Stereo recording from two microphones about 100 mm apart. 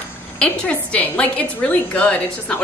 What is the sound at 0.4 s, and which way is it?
A woman's voice, 15° left (ahead or behind).